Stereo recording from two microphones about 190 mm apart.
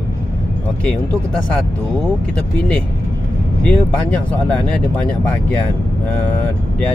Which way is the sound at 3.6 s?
5° left (ahead or behind).